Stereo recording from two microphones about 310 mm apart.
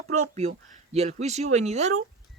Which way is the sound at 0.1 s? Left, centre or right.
Right.